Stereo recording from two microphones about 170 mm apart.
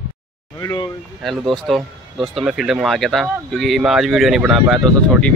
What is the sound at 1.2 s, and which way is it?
Speech, centre (ahead or behind).